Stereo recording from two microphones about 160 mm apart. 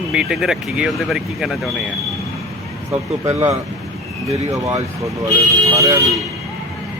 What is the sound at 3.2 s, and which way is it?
Speech, 20° right (ahead or behind).